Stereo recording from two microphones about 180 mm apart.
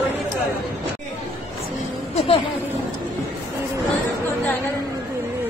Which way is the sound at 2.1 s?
35° left (ahead or behind).